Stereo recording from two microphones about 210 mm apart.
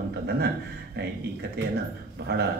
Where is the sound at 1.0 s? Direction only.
50° right (ahead or behind).